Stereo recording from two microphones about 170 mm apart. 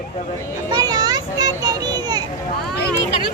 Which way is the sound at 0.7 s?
20° right (ahead or behind).